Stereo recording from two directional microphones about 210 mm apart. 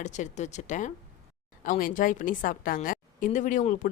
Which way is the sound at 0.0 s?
35° left (ahead or behind).